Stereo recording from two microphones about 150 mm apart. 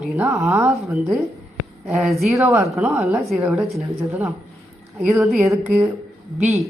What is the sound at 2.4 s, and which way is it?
Speech, 15° right (ahead or behind).